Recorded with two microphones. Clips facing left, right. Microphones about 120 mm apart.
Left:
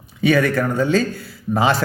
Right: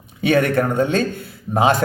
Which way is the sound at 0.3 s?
25° right (ahead or behind).